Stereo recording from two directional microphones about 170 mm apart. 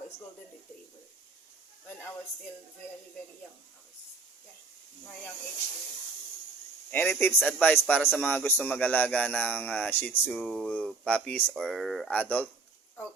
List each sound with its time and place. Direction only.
6.9 s speech: 10° left (ahead or behind)